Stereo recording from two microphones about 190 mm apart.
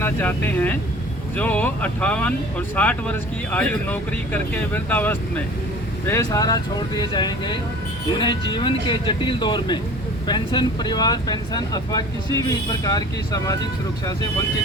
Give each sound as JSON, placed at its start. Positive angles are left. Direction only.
{"t": 0.0, "sound": "speech", "side_deg": 10}